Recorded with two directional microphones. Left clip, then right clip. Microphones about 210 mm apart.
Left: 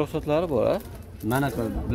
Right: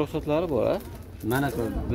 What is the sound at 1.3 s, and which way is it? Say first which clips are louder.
Speech: left 1 dB; 55° left (ahead or behind).